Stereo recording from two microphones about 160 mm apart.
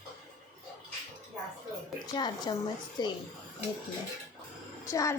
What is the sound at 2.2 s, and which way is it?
Speech, 25° left (ahead or behind).